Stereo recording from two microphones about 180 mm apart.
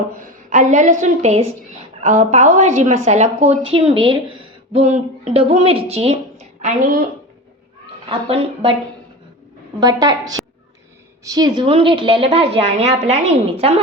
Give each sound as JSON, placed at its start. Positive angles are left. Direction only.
{"t": 0.2, "sound": "a woman's voice", "side_deg": -45}
{"t": 9.8, "sound": "a woman's voice", "side_deg": -20}